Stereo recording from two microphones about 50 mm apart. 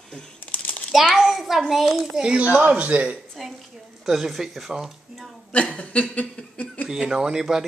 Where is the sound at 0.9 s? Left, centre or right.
Centre.